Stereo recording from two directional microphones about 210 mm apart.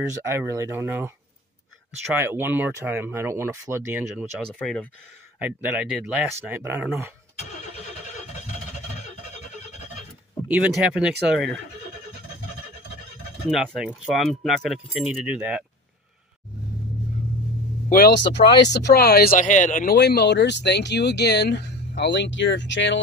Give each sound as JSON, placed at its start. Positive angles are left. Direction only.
{"t": 0.2, "sound": "speech", "side_deg": -10}
{"t": 2.1, "sound": "speech", "side_deg": -10}
{"t": 4.6, "sound": "speech", "side_deg": 5}
{"t": 5.4, "sound": "speech", "side_deg": -10}
{"t": 10.5, "sound": "speech", "side_deg": -5}
{"t": 13.5, "sound": "speech", "side_deg": 0}
{"t": 17.8, "sound": "speech", "side_deg": 45}
{"t": 20.0, "sound": "speech", "side_deg": 55}